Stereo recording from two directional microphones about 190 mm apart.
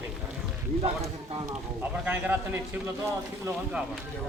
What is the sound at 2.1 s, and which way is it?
Speech, 10° right (ahead or behind).